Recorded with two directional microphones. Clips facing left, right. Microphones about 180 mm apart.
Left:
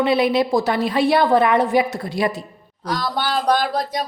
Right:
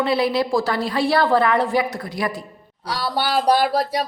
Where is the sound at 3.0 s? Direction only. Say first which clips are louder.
Right 3 dB; 10° right (ahead or behind).